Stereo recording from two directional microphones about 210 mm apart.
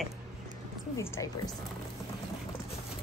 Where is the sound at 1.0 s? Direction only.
15° left (ahead or behind).